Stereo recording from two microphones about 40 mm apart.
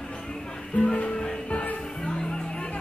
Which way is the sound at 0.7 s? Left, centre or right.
Left.